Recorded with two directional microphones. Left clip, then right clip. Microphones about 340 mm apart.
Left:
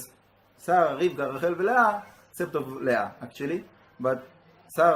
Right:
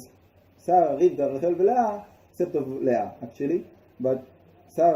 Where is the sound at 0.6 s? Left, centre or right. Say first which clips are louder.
Right 3 dB; left.